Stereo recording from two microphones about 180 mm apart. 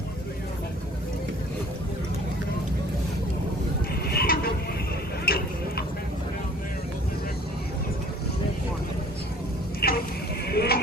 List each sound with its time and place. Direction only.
4.1 s vehicle: 60° left (ahead or behind)
5.2 s tick-tock: 55° left (ahead or behind)
9.8 s a sound: 60° left (ahead or behind)